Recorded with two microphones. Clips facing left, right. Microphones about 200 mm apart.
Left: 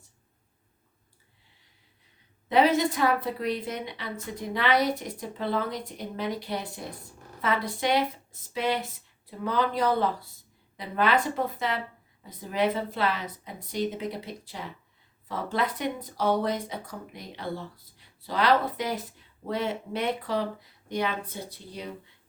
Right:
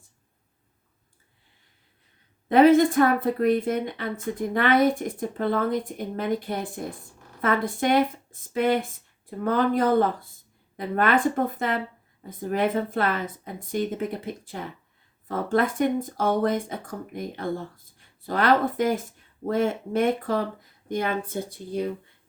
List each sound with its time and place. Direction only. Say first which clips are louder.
2.5 s speech: right 6 dB; 50° right (ahead or behind)